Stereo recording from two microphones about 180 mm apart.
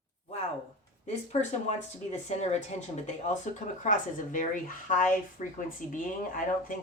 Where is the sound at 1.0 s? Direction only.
40° left (ahead or behind).